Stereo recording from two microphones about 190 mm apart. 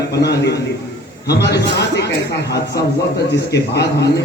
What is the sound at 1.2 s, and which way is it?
Speech, 60° left (ahead or behind).